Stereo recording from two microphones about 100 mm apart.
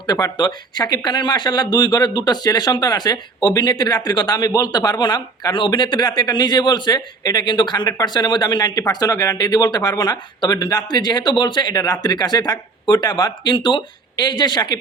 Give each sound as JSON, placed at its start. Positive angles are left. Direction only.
{"t": 0.1, "sound": "speech", "side_deg": 45}